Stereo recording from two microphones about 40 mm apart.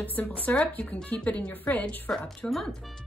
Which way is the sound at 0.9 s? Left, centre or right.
Left.